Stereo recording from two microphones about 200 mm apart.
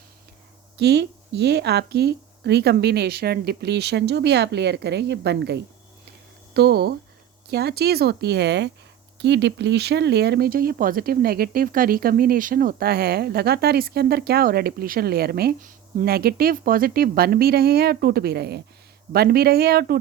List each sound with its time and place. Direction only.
0.8 s speech: 55° right (ahead or behind)